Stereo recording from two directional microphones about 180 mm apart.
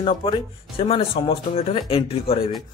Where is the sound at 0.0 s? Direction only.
30° left (ahead or behind).